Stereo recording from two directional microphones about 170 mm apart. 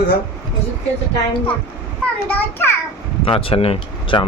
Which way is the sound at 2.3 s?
15° left (ahead or behind).